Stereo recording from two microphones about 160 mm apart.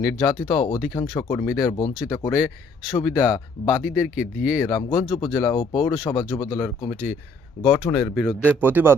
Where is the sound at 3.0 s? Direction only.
20° left (ahead or behind).